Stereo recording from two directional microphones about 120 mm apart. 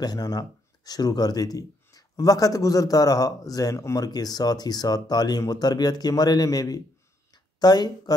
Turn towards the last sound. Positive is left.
turn(degrees=35)  # may be behind; listen again after turning